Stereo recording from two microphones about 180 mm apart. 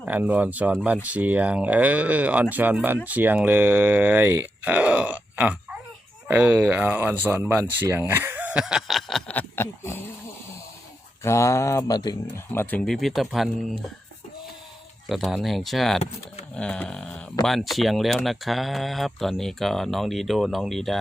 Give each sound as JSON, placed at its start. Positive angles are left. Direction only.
{"t": 0.0, "sound": "speech", "side_deg": -10}
{"t": 11.2, "sound": "speech", "side_deg": 15}
{"t": 12.3, "sound": "speech", "side_deg": 10}
{"t": 15.1, "sound": "speech", "side_deg": 0}